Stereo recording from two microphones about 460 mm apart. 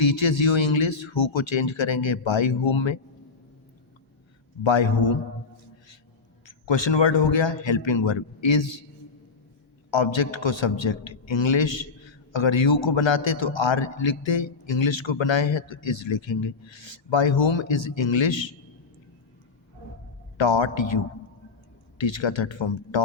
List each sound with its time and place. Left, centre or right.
0.0 s a man's voice: left
4.6 s a man's voice: left
6.4 s a man's voice: left
9.9 s a man's voice: left
20.4 s a man's voice: left